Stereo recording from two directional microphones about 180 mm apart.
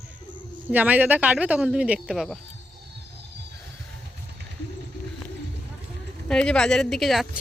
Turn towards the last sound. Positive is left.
turn(degrees=0)  # may be behind; listen again after turning